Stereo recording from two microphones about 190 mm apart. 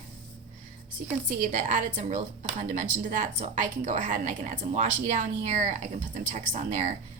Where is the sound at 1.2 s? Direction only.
40° right (ahead or behind).